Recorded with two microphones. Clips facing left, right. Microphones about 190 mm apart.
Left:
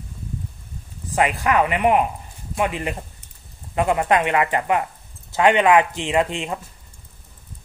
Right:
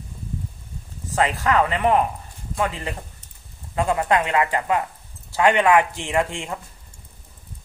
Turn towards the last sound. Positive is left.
turn(degrees=20)  # may be behind; listen again after turning